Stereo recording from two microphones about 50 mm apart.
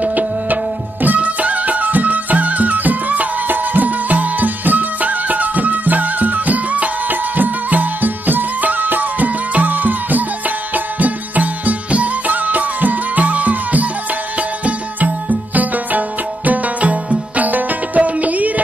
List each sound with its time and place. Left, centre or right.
0.0 s music: right